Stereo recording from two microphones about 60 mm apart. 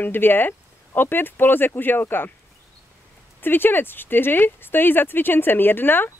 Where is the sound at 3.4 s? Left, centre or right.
Left.